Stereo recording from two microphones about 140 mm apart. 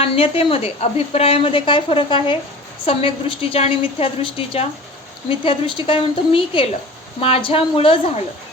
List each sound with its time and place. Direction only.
0.0 s a woman's voice: 45° left (ahead or behind)